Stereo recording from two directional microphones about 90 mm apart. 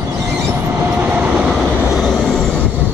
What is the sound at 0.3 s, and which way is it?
Train, 25° right (ahead or behind).